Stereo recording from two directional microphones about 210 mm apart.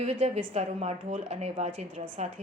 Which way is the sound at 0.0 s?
30° right (ahead or behind).